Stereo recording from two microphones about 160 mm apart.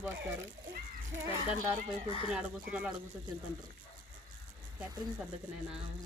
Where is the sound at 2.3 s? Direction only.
5° right (ahead or behind).